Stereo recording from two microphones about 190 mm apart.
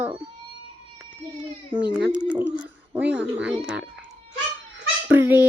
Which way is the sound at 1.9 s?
5° right (ahead or behind).